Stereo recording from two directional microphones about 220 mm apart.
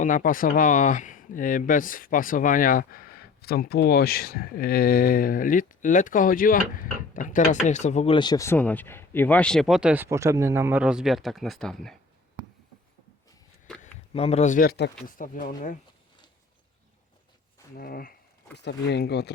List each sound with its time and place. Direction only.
0.0 s speech: 35° left (ahead or behind); by 11.9 s centre (ahead or behind)
14.1 s speech: 25° left (ahead or behind)
17.7 s speech: 40° left (ahead or behind)